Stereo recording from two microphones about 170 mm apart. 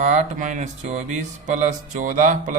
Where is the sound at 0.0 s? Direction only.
45° right (ahead or behind).